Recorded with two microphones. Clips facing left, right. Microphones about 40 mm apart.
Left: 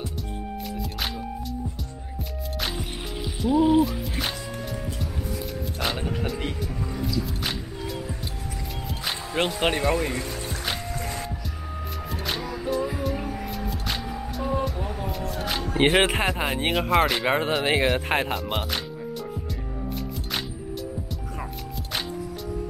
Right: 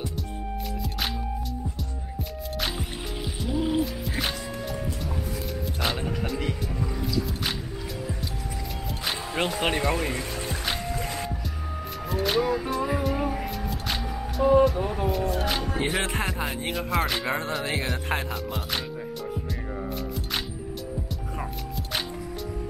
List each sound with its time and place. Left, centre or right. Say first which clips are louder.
3.4 s music: left 7 dB; centre
5.8 s speech: left 1 dB; centre
9.0 s music: left 2 dB; centre
12.1 s music: right 8 dB; centre
15.8 s speech: left 11 dB; left
16.7 s speech: left 5 dB; centre
17.6 s speech: left 6 dB; left
18.3 s speech: left 3 dB; centre